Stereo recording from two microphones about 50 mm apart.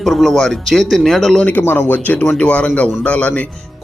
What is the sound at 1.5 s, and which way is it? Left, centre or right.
A man's voice, left.